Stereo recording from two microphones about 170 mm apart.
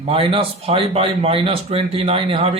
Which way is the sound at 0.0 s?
35° right (ahead or behind).